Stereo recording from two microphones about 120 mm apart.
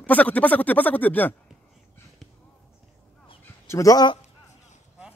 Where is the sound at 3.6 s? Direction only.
25° left (ahead or behind).